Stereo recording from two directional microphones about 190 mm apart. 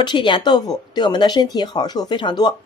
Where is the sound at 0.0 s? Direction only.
25° left (ahead or behind).